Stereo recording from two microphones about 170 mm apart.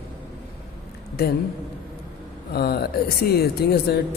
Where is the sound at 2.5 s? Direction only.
65° left (ahead or behind).